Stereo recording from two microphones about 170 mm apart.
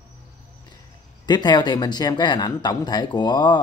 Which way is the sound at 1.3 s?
25° left (ahead or behind).